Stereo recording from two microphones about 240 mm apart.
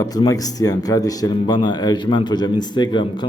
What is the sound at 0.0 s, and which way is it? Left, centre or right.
A man's voice, centre.